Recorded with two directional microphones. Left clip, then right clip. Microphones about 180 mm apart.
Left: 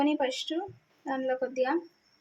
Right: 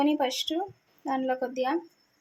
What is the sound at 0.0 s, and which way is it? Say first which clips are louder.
A woman's voice: right 2 dB; 10° right (ahead or behind).